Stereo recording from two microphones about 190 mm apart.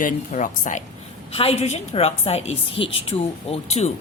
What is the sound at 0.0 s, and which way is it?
A woman's voice, 45° left (ahead or behind).